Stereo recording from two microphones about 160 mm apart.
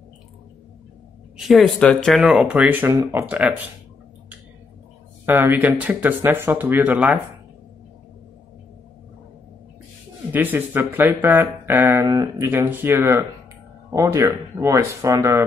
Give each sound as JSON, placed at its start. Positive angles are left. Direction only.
{"t": 1.4, "sound": "speech", "side_deg": 0}
{"t": 5.2, "sound": "speech", "side_deg": -15}
{"t": 10.3, "sound": "speech", "side_deg": -10}